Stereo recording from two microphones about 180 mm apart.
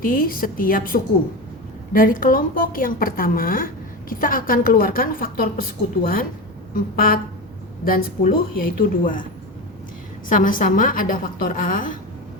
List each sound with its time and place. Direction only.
0.0 s a woman's voice: 50° left (ahead or behind)
10.2 s a woman's voice: 50° left (ahead or behind)